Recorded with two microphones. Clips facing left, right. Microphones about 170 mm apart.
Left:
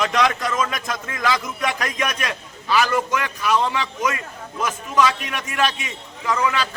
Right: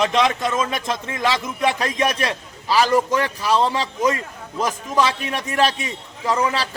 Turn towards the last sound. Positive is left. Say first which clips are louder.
# right 1 dB
turn(degrees=-35)  # may be behind; listen again after turning